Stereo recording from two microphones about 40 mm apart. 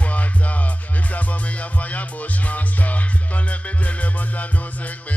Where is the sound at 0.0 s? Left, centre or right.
Left.